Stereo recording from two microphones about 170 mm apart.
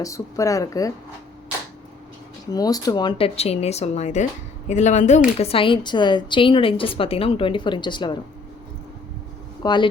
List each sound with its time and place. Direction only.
0.0 s speech: 20° left (ahead or behind)
2.5 s speech: 20° left (ahead or behind)
9.6 s speech: 25° left (ahead or behind)